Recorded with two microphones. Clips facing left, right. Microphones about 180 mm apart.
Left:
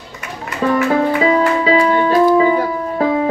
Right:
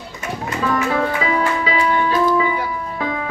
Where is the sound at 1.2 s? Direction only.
35° left (ahead or behind).